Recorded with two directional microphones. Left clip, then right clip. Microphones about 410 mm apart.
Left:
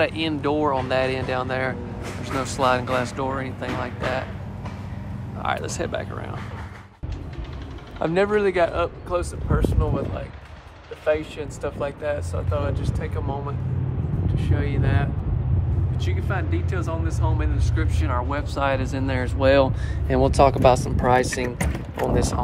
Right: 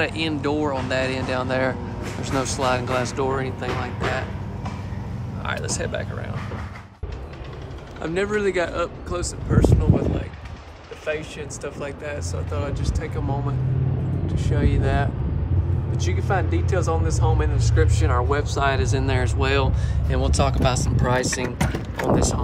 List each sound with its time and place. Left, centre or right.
0.0 s speech: centre
5.4 s speech: centre
8.0 s speech: centre
11.1 s speech: centre